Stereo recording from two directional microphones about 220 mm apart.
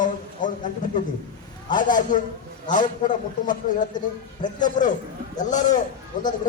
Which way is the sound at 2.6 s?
35° left (ahead or behind).